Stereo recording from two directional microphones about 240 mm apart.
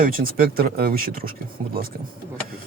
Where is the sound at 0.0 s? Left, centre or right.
Right.